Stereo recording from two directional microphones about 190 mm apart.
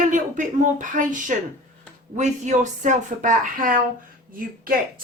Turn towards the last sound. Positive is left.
turn(degrees=-50)  # may be behind; listen again after turning